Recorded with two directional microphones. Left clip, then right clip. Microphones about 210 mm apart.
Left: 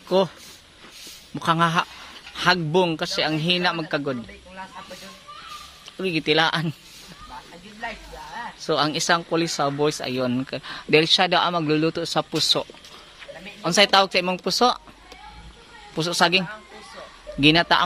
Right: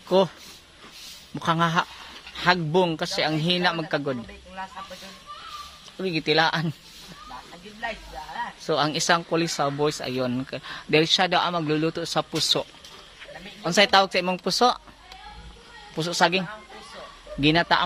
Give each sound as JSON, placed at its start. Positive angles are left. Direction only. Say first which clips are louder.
{"t": 0.1, "sound": "a man's voice", "louder": "even", "side_deg": 0}
{"t": 1.3, "sound": "a man's voice", "louder": "left 2 dB", "side_deg": 5}
{"t": 5.9, "sound": "speech", "louder": "left 2 dB", "side_deg": 10}
{"t": 8.6, "sound": "speech", "louder": "left 1 dB", "side_deg": 5}
{"t": 16.0, "sound": "speech", "louder": "left 2 dB", "side_deg": 15}